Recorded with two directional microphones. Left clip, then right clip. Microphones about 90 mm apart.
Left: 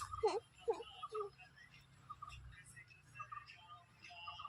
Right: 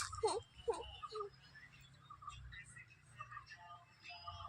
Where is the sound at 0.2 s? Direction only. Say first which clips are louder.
Left 2 dB; 30° left (ahead or behind).